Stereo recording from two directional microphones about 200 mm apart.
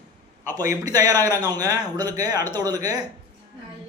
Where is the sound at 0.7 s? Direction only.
15° right (ahead or behind).